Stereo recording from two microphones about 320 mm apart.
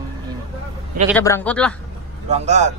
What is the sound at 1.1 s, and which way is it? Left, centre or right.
Speech, centre.